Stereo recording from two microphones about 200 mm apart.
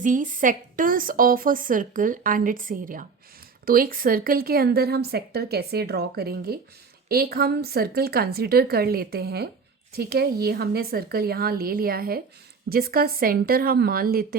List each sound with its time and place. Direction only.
0.0 s a woman's voice: 40° right (ahead or behind)